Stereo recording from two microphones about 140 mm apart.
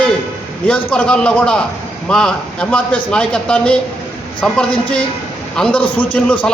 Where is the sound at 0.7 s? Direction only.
10° left (ahead or behind).